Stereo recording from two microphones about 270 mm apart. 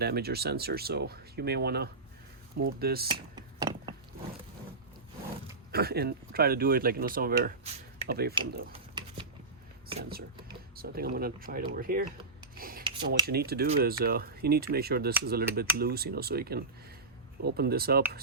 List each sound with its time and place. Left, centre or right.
0.0 s speech: right
3.1 s a sound: centre
5.7 s speech: right
10.0 s speech: right
12.5 s a sound: right
13.0 s speech: right